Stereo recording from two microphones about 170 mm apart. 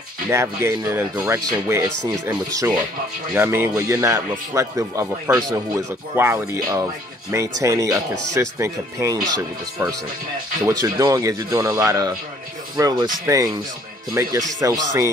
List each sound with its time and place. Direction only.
0.3 s speech: 15° right (ahead or behind)